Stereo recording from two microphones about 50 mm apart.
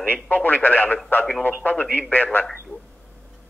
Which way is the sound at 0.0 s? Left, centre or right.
Left.